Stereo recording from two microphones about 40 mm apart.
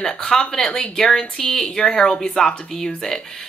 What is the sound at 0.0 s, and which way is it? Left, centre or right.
Speech, centre.